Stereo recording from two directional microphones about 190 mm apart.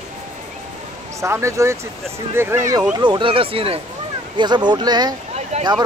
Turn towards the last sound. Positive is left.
turn(degrees=-35)  # may be behind; listen again after turning